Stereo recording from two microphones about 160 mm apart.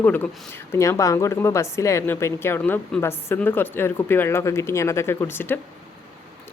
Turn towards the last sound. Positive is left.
turn(degrees=15)  # may be behind; listen again after turning